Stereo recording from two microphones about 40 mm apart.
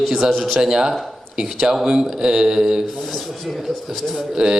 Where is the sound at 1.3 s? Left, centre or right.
Centre.